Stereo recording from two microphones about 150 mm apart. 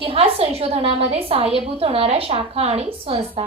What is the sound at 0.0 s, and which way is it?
A woman's voice, 40° right (ahead or behind).